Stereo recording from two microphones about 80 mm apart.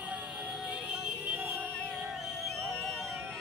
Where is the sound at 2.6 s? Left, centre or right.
Centre.